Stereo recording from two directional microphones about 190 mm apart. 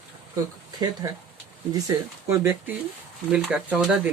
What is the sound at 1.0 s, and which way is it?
Speech, 15° right (ahead or behind).